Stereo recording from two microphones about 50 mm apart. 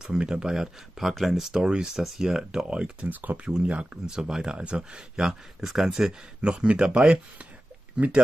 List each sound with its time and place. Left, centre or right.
0.0 s speech: centre
3.1 s speech: right
3.6 s speech: right
5.2 s speech: centre
6.5 s speech: centre